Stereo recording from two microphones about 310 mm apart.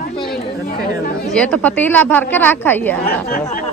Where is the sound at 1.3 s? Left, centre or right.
Centre.